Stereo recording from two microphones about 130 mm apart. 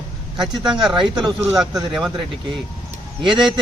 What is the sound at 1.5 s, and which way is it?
Speech, 5° right (ahead or behind).